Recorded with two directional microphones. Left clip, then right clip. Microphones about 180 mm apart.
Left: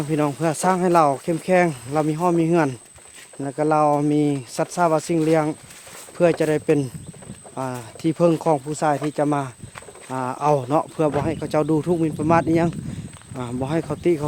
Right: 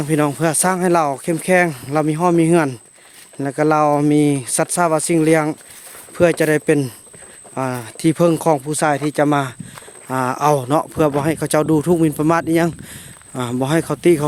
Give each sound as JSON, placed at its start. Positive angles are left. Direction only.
{"t": 0.0, "sound": "speech", "side_deg": -40}